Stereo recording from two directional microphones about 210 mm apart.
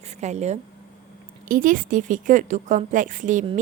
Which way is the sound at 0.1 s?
35° right (ahead or behind).